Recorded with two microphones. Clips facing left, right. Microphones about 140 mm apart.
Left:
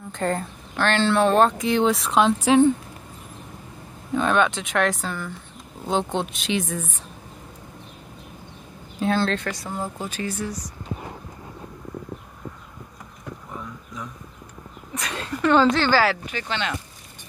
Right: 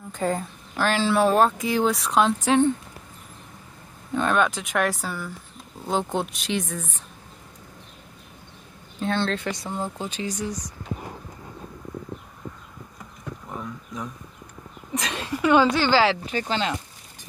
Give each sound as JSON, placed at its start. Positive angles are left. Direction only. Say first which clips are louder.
{"t": 0.1, "sound": "speech", "louder": "even", "side_deg": -5}
{"t": 4.1, "sound": "speech", "louder": "left 2 dB", "side_deg": 0}
{"t": 9.0, "sound": "speech", "louder": "left 3 dB", "side_deg": 5}
{"t": 9.5, "sound": "speech", "louder": "even", "side_deg": -20}
{"t": 15.0, "sound": "a sound", "louder": "right 2 dB", "side_deg": -20}
{"t": 15.4, "sound": "speech", "louder": "left 1 dB", "side_deg": -5}
{"t": 15.9, "sound": "speech", "louder": "even", "side_deg": -20}
{"t": 16.3, "sound": "speech", "louder": "right 3 dB", "side_deg": -35}